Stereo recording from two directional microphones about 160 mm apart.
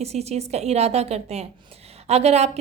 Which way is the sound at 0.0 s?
40° right (ahead or behind).